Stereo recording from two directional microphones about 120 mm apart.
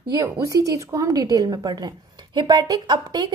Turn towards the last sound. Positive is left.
turn(degrees=-35)  # may be behind; listen again after turning